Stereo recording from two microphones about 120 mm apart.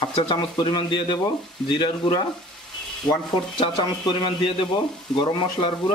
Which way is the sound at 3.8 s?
40° left (ahead or behind).